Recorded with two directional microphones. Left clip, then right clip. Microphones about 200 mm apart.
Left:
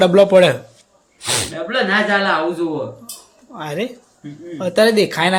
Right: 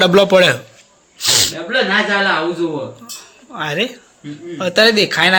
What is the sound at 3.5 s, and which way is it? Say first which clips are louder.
A man's voice: right 5 dB; centre (ahead or behind).